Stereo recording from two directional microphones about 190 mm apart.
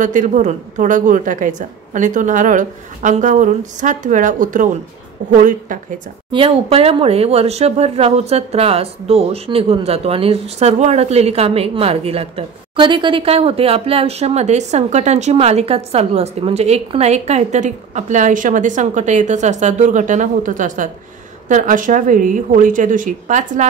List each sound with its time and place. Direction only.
0.0 s a woman's voice: 40° right (ahead or behind)
6.3 s a woman's voice: 30° right (ahead or behind)